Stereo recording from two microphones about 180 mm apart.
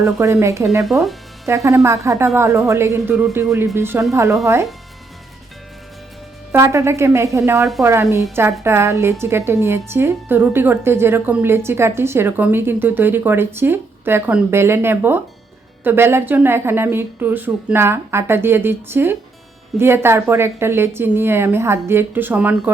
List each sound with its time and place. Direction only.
0.0 s a woman's voice: 15° right (ahead or behind)
6.5 s a woman's voice: 15° right (ahead or behind)